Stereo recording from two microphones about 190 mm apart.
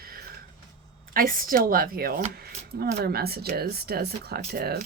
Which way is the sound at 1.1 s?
50° right (ahead or behind).